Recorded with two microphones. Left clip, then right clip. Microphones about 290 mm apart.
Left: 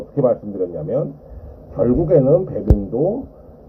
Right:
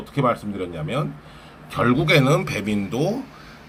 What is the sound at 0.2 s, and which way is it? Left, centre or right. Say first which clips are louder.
Speech: left 5 dB; centre.